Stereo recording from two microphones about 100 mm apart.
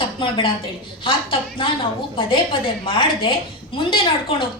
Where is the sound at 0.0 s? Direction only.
55° left (ahead or behind).